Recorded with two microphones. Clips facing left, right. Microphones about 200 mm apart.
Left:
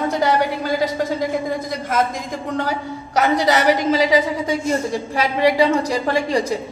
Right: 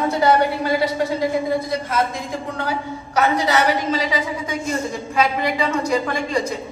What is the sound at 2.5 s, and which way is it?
A woman's voice, 40° left (ahead or behind).